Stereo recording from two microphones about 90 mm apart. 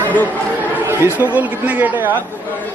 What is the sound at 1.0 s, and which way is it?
Speech, 20° right (ahead or behind).